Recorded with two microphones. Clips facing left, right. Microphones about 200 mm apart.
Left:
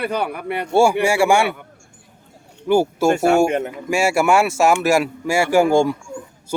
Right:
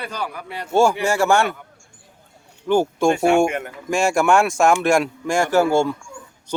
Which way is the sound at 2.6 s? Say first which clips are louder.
Left 1 dB; 10° left (ahead or behind).